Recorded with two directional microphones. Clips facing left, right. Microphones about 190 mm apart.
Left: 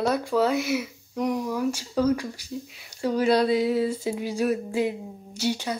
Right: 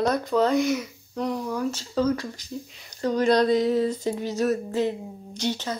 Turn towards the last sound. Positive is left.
turn(degrees=10)  # may be behind; listen again after turning